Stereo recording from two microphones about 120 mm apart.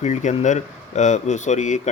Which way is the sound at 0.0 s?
80° left.